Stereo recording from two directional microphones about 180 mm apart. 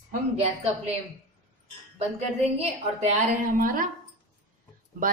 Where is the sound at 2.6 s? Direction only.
40° right (ahead or behind).